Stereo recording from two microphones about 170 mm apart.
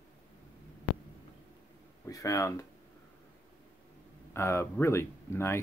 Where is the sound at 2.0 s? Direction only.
20° left (ahead or behind).